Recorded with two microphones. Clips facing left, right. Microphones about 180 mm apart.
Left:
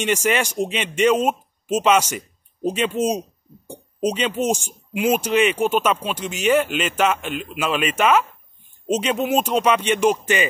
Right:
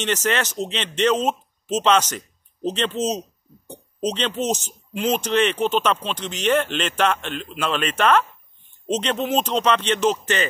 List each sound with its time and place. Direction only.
0.0 s speech: 10° left (ahead or behind)